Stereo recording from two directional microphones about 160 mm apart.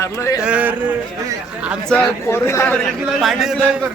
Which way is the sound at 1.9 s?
5° left (ahead or behind).